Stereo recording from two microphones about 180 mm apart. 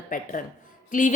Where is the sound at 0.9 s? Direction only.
45° left (ahead or behind).